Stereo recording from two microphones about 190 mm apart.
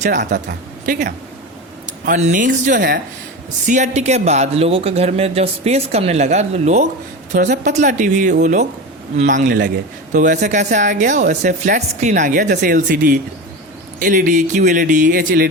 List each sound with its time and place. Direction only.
0.2 s a woman's voice: 65° right (ahead or behind)
2.0 s speech: 40° right (ahead or behind)
3.7 s a man's voice: 40° right (ahead or behind)